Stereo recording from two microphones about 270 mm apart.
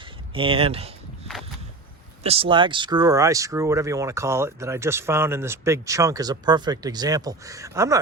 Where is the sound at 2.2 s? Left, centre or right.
Right.